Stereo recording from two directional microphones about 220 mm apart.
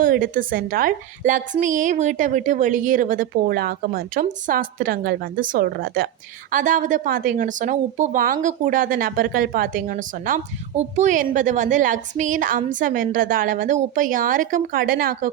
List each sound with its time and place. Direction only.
0.0 s speech: 40° right (ahead or behind)